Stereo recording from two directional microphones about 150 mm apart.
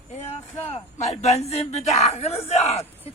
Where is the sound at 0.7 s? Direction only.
45° left (ahead or behind).